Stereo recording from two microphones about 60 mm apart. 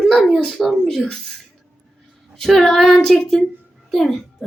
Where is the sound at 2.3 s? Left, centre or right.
Centre.